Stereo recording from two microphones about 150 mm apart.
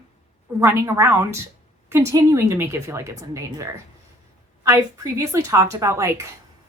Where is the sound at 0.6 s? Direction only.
20° right (ahead or behind).